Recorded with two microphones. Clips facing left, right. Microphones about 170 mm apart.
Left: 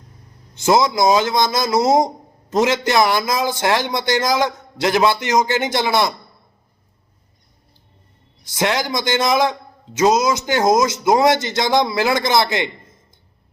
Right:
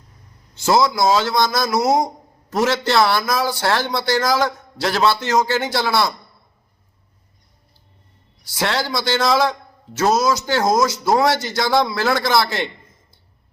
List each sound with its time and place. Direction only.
0.5 s a man's voice: 20° left (ahead or behind)
8.4 s a man's voice: 20° left (ahead or behind)